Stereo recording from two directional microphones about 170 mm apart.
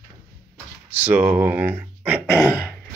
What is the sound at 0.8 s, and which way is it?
Speech, 10° right (ahead or behind).